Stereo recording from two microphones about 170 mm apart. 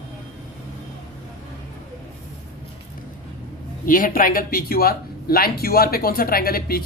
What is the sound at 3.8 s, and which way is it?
Speech, 55° left (ahead or behind).